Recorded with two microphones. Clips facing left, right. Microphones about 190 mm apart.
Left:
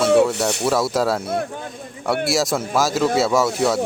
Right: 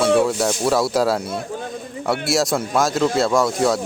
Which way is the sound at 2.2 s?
Centre (ahead or behind).